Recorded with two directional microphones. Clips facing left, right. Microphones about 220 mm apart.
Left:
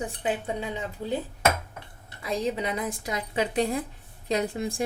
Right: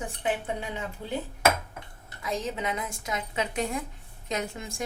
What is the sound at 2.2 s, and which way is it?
A woman's voice, 35° left (ahead or behind).